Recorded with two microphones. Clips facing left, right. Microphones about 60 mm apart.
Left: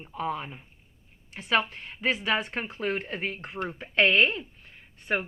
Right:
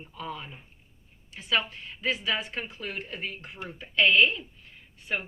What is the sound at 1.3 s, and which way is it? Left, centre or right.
Speech, left.